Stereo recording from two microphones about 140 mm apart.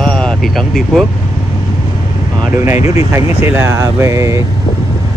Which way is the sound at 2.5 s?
20° right (ahead or behind).